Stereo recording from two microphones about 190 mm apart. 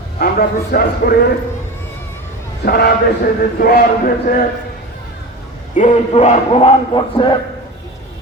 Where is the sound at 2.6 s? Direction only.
55° left (ahead or behind).